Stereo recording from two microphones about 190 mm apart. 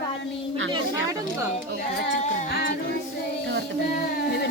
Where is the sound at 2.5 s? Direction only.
55° left (ahead or behind).